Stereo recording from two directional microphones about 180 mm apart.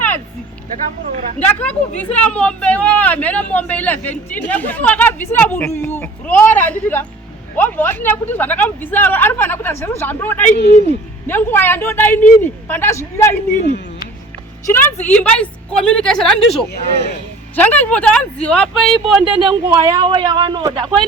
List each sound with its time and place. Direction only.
0.9 s speech: 40° right (ahead or behind)
1.4 s speech: 5° left (ahead or behind)
10.6 s speech: 35° left (ahead or behind)
11.3 s speech: 10° left (ahead or behind)
13.6 s speech: 40° left (ahead or behind)
14.7 s speech: 10° left (ahead or behind)
19.7 s speech: 20° right (ahead or behind)